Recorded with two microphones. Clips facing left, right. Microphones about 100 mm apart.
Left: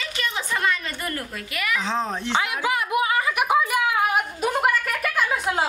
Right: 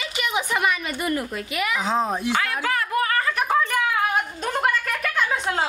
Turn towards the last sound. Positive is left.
turn(degrees=5)  # may be behind; listen again after turning